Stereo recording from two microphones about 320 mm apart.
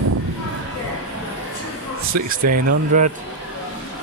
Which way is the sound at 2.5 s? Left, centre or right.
Right.